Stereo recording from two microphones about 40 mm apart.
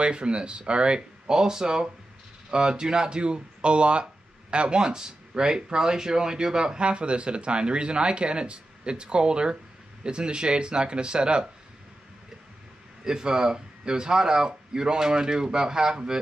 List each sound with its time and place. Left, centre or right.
0.0 s speech: right
13.0 s speech: centre